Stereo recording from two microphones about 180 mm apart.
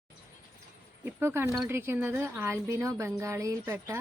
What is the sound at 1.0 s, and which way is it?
A woman's voice, 15° right (ahead or behind).